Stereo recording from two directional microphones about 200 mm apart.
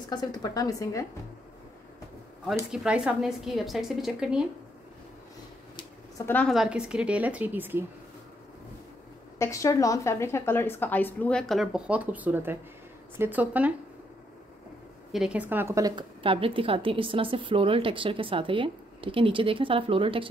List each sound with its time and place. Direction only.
0.1 s a woman's voice: 20° left (ahead or behind)
2.7 s a woman's voice: 5° right (ahead or behind)
5.8 s speech: 15° left (ahead or behind); by 7.8 s 10° right (ahead or behind)
9.4 s a woman's voice: 15° left (ahead or behind); by 13.7 s 5° right (ahead or behind)
15.1 s a woman's voice: 5° right (ahead or behind); by 20.2 s 25° right (ahead or behind)